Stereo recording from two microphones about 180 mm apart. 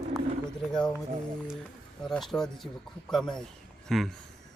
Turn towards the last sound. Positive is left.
turn(degrees=0)  # may be behind; listen again after turning